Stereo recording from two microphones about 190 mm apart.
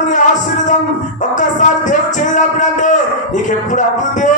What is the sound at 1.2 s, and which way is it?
Music, 40° left (ahead or behind).